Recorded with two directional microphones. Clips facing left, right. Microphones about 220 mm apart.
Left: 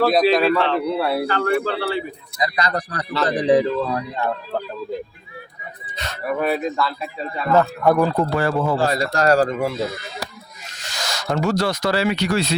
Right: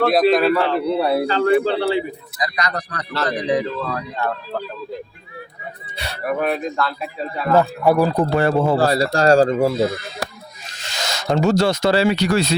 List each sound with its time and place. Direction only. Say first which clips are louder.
0.0 s a man's voice: right 1 dB; centre (ahead or behind)
0.9 s speech: right 3 dB; 20° right (ahead or behind)
2.4 s speech: left 2 dB; 30° left (ahead or behind)
3.8 s speech: left 2 dB; 15° left (ahead or behind)
6.0 s speech: right 1 dB; 10° right (ahead or behind)
6.4 s a man's voice: left 2 dB; centre (ahead or behind)
7.5 s a man's voice: right 1 dB; 15° right (ahead or behind)
8.1 s speech: right 3 dB; 20° right (ahead or behind)
8.7 s a man's voice: right 3 dB; 35° right (ahead or behind)
10.8 s speech: right 3 dB; 25° right (ahead or behind); by 12.5 s 40° right (ahead or behind)